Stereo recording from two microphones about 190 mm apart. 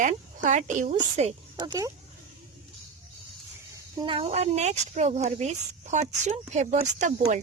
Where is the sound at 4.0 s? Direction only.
30° right (ahead or behind).